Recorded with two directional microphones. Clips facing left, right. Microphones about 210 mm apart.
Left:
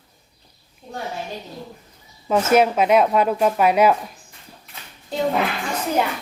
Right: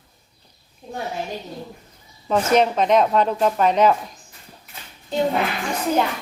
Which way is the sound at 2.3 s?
5° left (ahead or behind).